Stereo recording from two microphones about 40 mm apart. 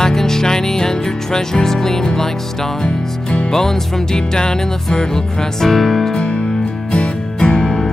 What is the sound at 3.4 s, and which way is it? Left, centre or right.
Music, centre.